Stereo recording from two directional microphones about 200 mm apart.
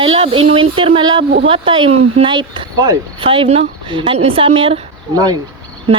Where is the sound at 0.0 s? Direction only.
25° right (ahead or behind).